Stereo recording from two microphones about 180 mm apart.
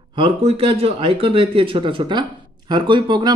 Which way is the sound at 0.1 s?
30° right (ahead or behind).